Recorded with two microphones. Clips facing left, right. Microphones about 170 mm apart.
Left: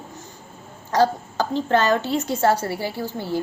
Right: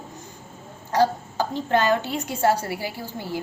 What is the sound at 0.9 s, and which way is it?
Speech, 15° right (ahead or behind).